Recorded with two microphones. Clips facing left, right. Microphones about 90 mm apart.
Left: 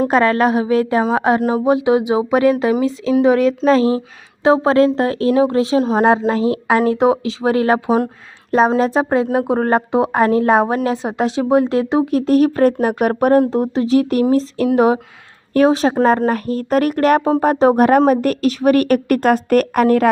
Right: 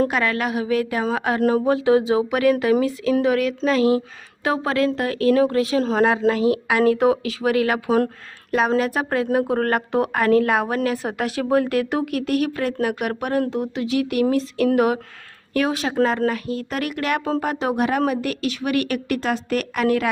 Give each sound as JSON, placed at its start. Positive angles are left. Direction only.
{"t": 0.1, "sound": "speech", "side_deg": 35}
{"t": 12.2, "sound": "a woman's voice", "side_deg": 35}